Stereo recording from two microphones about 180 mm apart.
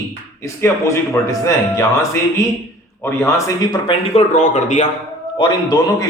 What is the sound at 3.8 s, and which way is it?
A man's voice, 40° left (ahead or behind).